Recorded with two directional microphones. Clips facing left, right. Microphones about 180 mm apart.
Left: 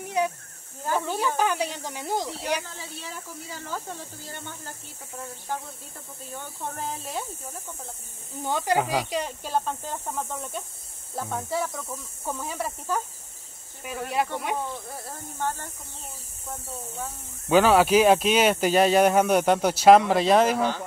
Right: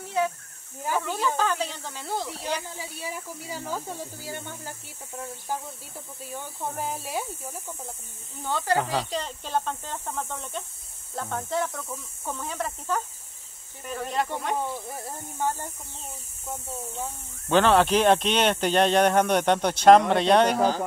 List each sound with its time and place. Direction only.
0.0 s snake: 15° left (ahead or behind)
1.0 s speech: 15° left (ahead or behind)
2.6 s speech: 15° right (ahead or behind)
6.2 s speech: 10° right (ahead or behind)
8.5 s speech: 15° left (ahead or behind)
14.7 s speech: 10° right (ahead or behind)
17.5 s speech: 5° left (ahead or behind)
20.5 s speech: 40° right (ahead or behind)